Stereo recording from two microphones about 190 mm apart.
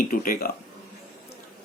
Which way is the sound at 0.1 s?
45° left (ahead or behind).